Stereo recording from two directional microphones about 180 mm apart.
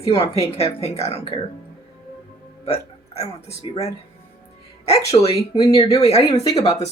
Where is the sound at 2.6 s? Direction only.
35° left (ahead or behind).